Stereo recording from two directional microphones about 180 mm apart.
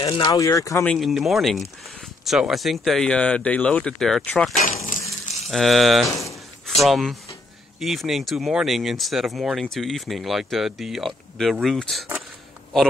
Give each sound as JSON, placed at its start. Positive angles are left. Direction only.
{"t": 0.0, "sound": "speech", "side_deg": 25}
{"t": 0.8, "sound": "speech", "side_deg": 0}